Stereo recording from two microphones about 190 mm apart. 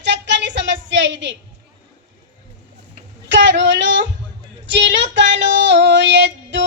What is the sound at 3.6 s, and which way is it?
Speech, 75° right (ahead or behind).